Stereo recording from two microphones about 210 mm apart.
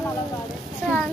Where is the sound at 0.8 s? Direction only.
10° left (ahead or behind).